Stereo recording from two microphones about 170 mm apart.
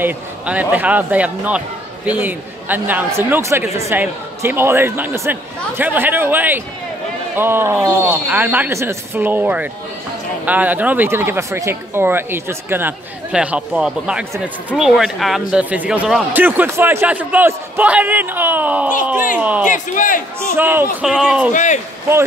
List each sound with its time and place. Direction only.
0.0 s speech: 10° right (ahead or behind)
19.7 s speech: 50° left (ahead or behind)
20.5 s speech: 10° right (ahead or behind)